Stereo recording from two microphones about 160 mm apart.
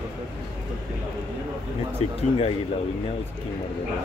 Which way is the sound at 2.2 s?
35° left (ahead or behind).